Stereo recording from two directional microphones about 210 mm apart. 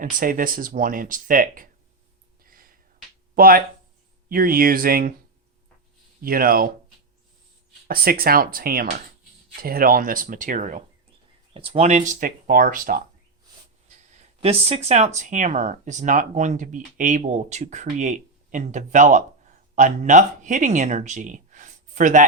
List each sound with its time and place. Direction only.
0.0 s speech: 40° right (ahead or behind)
2.4 s a sound: 45° right (ahead or behind)
3.3 s speech: 45° right (ahead or behind)
6.2 s speech: 45° right (ahead or behind)
7.9 s speech: 45° right (ahead or behind)